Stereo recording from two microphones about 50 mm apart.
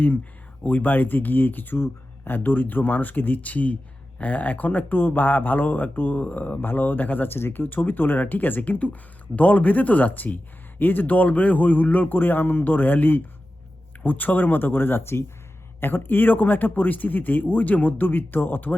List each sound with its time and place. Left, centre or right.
0.6 s speech: left
7.3 s speech: left